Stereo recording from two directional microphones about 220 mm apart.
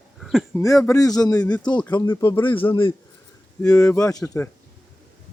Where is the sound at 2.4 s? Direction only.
25° left (ahead or behind).